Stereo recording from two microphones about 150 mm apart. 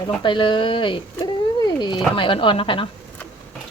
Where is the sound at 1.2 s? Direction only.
30° left (ahead or behind).